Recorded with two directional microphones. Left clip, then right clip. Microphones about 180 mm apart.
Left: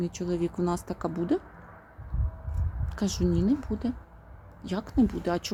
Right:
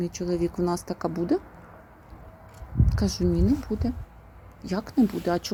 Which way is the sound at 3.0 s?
Centre (ahead or behind).